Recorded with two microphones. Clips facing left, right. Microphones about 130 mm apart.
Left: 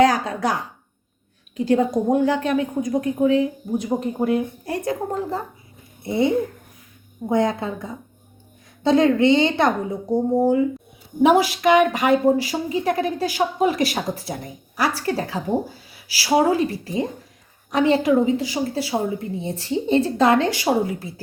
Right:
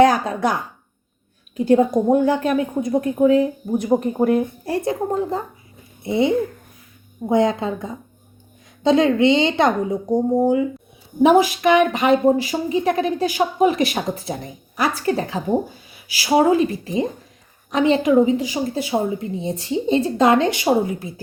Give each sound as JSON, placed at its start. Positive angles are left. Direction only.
{"t": 0.0, "sound": "a woman's voice", "side_deg": -25}
{"t": 3.3, "sound": "speech", "side_deg": -45}
{"t": 4.6, "sound": "speech", "side_deg": -30}
{"t": 6.0, "sound": "a woman's voice", "side_deg": -20}
{"t": 11.2, "sound": "a woman's voice", "side_deg": -20}